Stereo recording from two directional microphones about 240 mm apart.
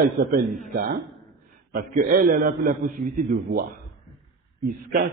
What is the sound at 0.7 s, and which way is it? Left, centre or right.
A man's voice, right.